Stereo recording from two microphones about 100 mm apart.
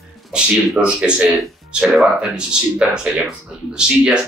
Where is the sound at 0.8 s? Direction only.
10° right (ahead or behind).